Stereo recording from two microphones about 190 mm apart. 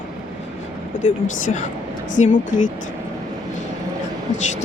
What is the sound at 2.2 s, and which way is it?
Speech, 45° left (ahead or behind).